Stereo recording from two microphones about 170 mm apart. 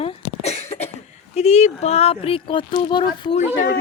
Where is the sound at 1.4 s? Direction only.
40° left (ahead or behind).